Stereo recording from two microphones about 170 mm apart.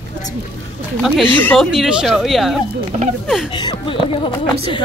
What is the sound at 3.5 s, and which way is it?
Speech, 25° left (ahead or behind).